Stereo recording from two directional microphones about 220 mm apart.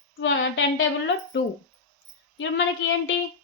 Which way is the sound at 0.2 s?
65° left (ahead or behind).